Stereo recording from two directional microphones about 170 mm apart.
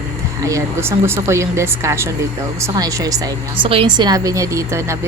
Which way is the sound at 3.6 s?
30° right (ahead or behind).